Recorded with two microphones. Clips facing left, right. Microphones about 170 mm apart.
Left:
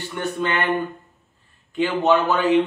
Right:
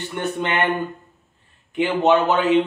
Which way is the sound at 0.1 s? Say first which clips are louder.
Even; 20° right (ahead or behind).